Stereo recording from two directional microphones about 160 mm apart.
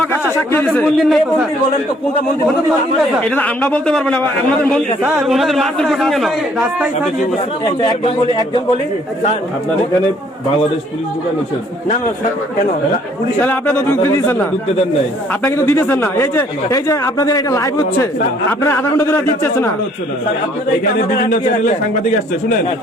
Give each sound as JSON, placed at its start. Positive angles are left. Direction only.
{"t": 0.7, "sound": "a man's voice", "side_deg": 5}
{"t": 3.2, "sound": "speech", "side_deg": 10}
{"t": 5.3, "sound": "a man's voice", "side_deg": 0}
{"t": 13.4, "sound": "speech", "side_deg": 10}
{"t": 15.3, "sound": "speech", "side_deg": 15}
{"t": 21.1, "sound": "a man's voice", "side_deg": 70}